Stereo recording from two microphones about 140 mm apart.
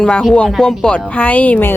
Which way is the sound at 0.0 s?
5° left (ahead or behind).